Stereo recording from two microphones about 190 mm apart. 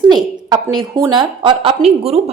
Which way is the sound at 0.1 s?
20° right (ahead or behind).